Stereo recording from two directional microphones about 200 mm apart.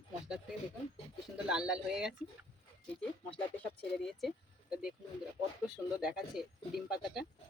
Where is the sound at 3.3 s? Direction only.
5° left (ahead or behind).